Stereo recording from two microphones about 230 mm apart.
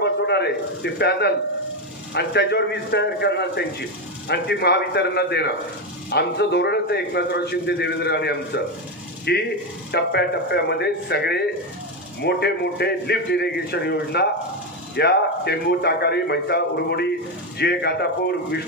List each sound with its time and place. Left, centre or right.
0.0 s speech: left